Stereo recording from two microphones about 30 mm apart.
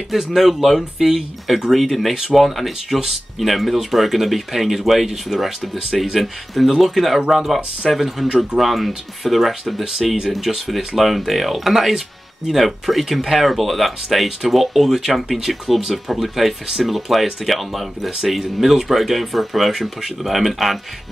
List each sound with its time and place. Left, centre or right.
0.4 s speech: centre
1.7 s speech: centre
15.7 s speech: centre